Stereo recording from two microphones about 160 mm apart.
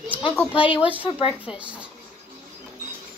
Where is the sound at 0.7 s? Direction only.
10° right (ahead or behind).